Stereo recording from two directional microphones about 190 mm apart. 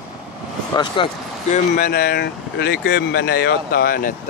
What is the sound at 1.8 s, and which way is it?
Speech, 55° left (ahead or behind).